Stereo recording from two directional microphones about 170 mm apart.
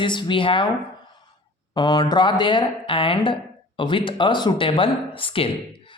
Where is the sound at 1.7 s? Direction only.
25° left (ahead or behind).